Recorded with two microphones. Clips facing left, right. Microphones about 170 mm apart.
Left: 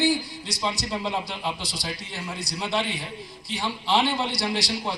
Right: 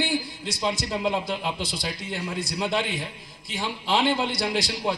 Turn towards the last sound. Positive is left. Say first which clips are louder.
# right 2 dB
turn(degrees=-50)  # may be behind; listen again after turning